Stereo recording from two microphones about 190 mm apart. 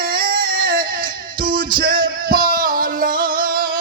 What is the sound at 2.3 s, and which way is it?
Music, 50° right (ahead or behind).